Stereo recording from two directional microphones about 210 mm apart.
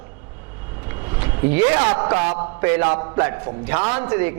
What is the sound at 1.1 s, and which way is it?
Speech, 15° right (ahead or behind).